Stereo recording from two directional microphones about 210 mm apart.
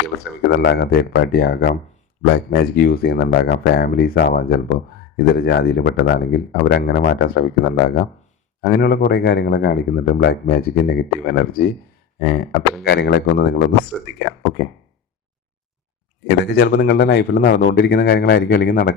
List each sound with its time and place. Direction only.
0.4 s speech: 50° left (ahead or behind)
16.4 s speech: 50° left (ahead or behind)